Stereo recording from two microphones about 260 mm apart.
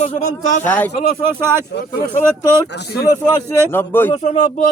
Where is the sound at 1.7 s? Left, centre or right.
Left.